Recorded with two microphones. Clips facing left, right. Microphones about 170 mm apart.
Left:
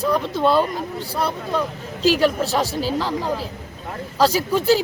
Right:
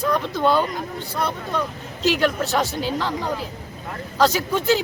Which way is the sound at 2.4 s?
30° left (ahead or behind).